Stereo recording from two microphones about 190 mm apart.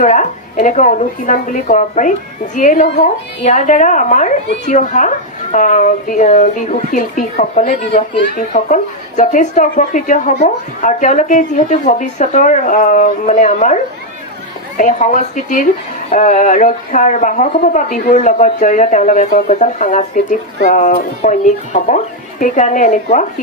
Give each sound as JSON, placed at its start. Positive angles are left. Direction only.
{"t": 0.0, "sound": "speech", "side_deg": 40}
{"t": 14.8, "sound": "speech", "side_deg": 40}